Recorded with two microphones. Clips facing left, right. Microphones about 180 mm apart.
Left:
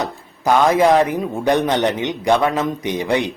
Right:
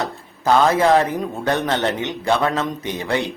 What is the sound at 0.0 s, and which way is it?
Speech, 15° left (ahead or behind).